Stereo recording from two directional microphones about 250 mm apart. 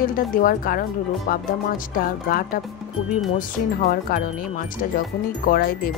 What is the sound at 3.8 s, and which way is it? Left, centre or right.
Speech, left.